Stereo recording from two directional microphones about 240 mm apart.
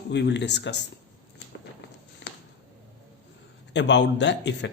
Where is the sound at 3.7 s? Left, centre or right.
Left.